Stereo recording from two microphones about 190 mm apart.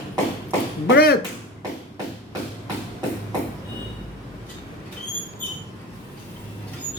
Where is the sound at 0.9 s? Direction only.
60° left (ahead or behind).